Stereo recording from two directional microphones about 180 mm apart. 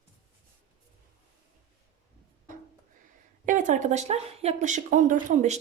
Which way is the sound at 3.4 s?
45° right (ahead or behind).